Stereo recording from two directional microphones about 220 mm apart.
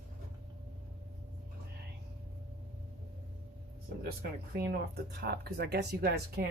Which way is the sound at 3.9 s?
45° right (ahead or behind).